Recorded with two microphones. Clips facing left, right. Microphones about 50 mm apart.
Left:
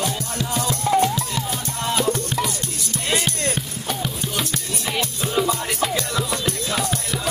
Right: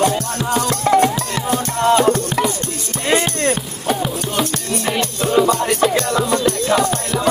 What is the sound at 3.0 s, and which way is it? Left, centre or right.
Music, right.